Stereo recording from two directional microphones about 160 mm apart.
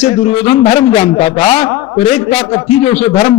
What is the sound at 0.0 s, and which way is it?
A man's voice, 40° left (ahead or behind).